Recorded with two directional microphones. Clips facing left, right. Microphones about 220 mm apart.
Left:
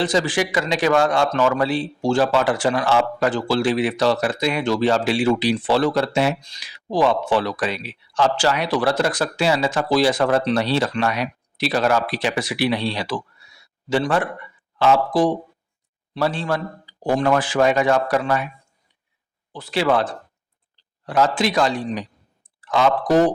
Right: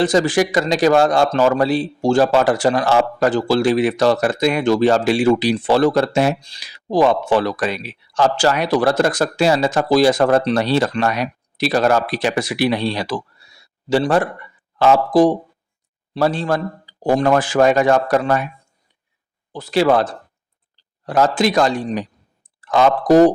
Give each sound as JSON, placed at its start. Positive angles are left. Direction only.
{"t": 0.0, "sound": "a man's voice", "side_deg": -45}
{"t": 19.5, "sound": "a man's voice", "side_deg": -40}